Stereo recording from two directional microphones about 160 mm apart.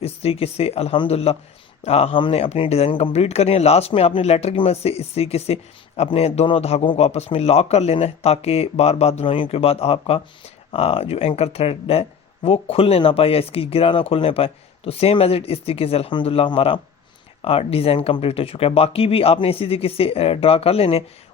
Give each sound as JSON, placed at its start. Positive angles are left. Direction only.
{"t": 0.0, "sound": "speech", "side_deg": 40}